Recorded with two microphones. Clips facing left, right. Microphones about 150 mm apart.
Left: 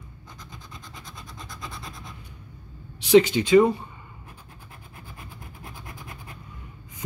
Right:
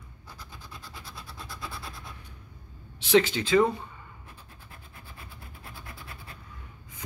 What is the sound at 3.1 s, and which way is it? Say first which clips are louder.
Speech: left 6 dB; 10° left (ahead or behind).